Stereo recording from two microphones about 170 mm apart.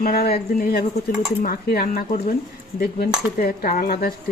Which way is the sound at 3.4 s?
55° left (ahead or behind).